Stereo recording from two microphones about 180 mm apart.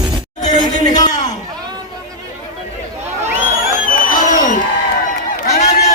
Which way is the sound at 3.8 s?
45° left (ahead or behind).